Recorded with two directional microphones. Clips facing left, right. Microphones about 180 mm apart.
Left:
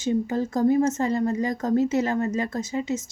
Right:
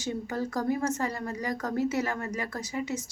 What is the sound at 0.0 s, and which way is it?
Speech, 20° left (ahead or behind).